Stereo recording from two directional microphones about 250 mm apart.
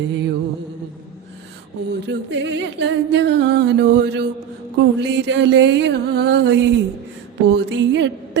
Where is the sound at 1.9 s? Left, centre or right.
Right.